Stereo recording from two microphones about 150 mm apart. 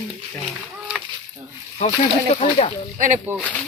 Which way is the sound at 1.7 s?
50° left (ahead or behind).